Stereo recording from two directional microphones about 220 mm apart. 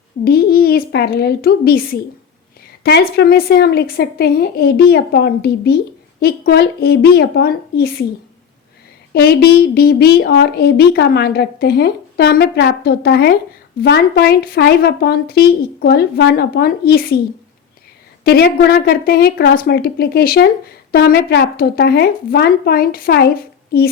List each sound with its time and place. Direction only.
0.3 s speech: 45° left (ahead or behind)
9.1 s speech: 45° left (ahead or behind)
18.3 s speech: 45° left (ahead or behind)